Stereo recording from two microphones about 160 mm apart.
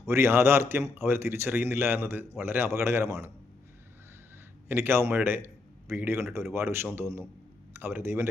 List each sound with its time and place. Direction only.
0.1 s a man's voice: 15° right (ahead or behind)
4.7 s a man's voice: 15° right (ahead or behind)